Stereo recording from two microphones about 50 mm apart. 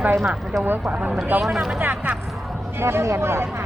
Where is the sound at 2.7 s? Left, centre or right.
Right.